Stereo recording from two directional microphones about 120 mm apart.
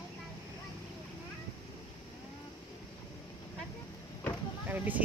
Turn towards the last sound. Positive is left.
turn(degrees=-15)  # may be behind; listen again after turning